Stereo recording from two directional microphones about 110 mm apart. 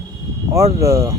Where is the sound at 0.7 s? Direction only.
25° right (ahead or behind).